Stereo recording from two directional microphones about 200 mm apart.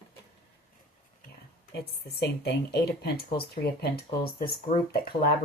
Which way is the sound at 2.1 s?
55° left (ahead or behind).